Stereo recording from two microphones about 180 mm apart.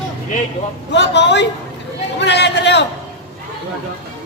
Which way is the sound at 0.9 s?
75° left (ahead or behind).